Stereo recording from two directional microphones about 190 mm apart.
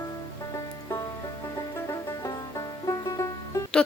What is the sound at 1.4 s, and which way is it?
Music, 15° left (ahead or behind).